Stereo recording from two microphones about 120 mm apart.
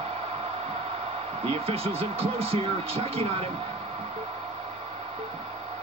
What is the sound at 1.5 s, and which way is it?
Speech, 55° right (ahead or behind).